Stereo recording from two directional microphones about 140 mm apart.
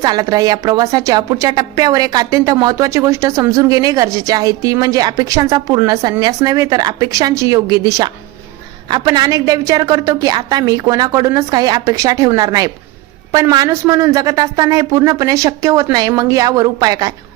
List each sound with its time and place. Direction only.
0.0 s speech: 25° right (ahead or behind)